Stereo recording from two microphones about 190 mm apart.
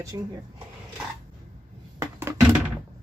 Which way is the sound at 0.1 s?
20° right (ahead or behind).